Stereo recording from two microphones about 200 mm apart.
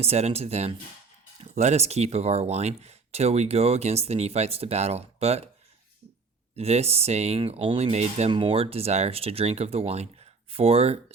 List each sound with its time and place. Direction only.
0.0 s speech: 30° right (ahead or behind)
6.6 s speech: 30° right (ahead or behind)